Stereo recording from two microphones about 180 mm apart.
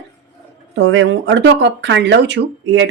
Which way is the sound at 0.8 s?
90° right.